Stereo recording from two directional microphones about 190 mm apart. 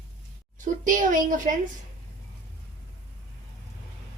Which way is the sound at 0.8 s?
45° right (ahead or behind).